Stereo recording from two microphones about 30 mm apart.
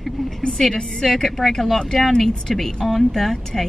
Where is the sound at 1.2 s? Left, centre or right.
Centre.